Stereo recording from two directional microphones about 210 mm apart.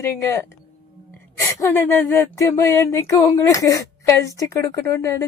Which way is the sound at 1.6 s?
10° left (ahead or behind).